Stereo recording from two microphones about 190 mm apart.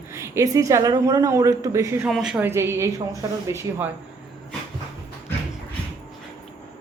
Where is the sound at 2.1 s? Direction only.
Centre (ahead or behind).